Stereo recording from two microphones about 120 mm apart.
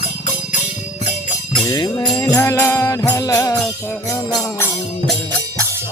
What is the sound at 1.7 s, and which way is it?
Music, 30° left (ahead or behind).